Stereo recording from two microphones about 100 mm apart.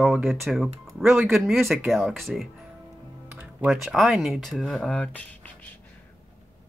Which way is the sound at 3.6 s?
5° right (ahead or behind).